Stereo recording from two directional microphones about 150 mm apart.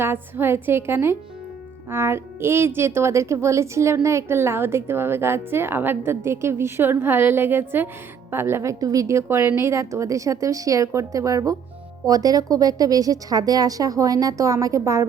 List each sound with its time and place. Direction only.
0.0 s a woman's voice: 15° right (ahead or behind)